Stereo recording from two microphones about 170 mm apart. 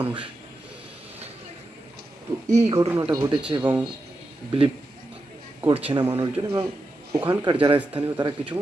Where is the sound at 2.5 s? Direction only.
40° right (ahead or behind).